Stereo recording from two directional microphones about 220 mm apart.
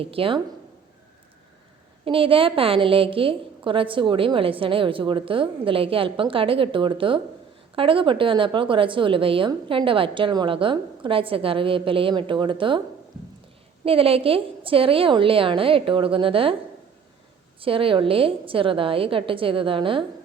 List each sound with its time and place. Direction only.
0.0 s a woman's voice: 25° right (ahead or behind)
2.0 s a woman's voice: 25° right (ahead or behind)
13.8 s a woman's voice: 25° right (ahead or behind)
17.6 s a woman's voice: 25° right (ahead or behind)